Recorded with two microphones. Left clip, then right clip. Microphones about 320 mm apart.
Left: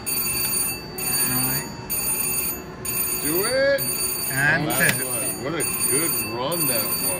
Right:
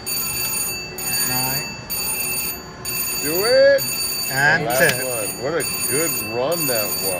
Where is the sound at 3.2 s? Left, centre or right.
Right.